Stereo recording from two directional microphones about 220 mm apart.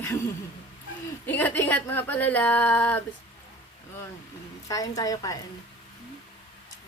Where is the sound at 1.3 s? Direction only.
10° left (ahead or behind).